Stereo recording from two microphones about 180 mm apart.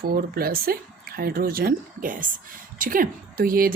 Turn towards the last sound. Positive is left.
turn(degrees=-55)  # may be behind; listen again after turning